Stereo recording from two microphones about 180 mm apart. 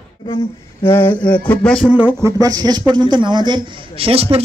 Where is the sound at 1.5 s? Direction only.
5° left (ahead or behind).